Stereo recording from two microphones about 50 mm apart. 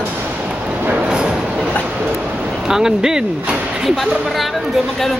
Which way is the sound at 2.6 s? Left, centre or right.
Centre.